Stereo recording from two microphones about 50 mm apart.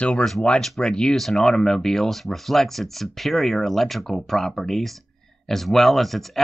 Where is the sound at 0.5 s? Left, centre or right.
Centre.